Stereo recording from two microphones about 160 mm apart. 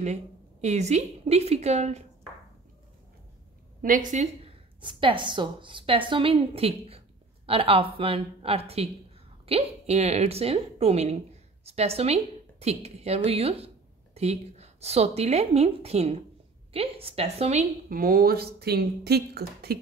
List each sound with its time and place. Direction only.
0.0 s a woman's voice: 45° right (ahead or behind)
3.8 s a woman's voice: 55° right (ahead or behind)
4.8 s a woman's voice: 30° right (ahead or behind)
17.8 s speech: 60° right (ahead or behind); by 19.8 s 75° right (ahead or behind)